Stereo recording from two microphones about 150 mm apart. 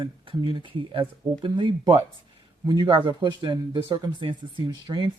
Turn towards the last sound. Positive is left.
turn(degrees=-25)  # may be behind; listen again after turning